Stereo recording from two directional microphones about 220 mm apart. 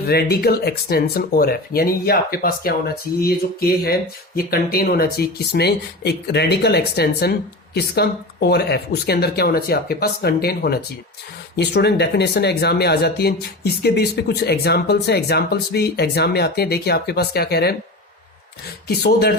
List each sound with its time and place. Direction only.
0.0 s speech: 45° left (ahead or behind)
18.9 s speech: 45° left (ahead or behind)